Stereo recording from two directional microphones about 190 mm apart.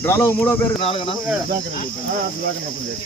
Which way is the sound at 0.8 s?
30° left (ahead or behind).